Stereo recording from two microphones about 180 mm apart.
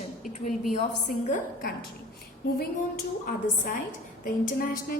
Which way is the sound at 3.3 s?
55° left (ahead or behind).